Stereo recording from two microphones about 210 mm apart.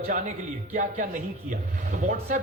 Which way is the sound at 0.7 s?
35° right (ahead or behind).